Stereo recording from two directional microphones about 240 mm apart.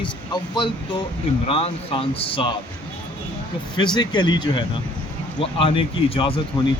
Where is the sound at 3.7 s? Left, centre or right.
Centre.